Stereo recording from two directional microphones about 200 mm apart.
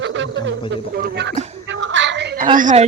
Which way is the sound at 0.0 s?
65° right (ahead or behind).